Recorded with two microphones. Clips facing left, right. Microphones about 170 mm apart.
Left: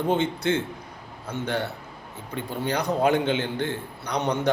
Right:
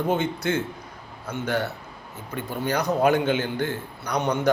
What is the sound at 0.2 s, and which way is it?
A man's voice, 30° left (ahead or behind).